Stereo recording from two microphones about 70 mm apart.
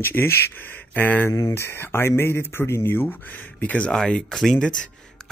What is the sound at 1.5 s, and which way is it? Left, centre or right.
Speech, left.